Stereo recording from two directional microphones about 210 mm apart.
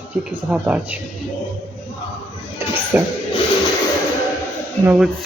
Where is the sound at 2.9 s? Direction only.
10° right (ahead or behind).